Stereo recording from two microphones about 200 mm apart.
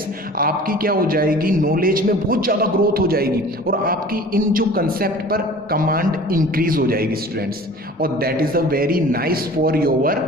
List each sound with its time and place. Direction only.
0.3 s a man's voice: 45° right (ahead or behind)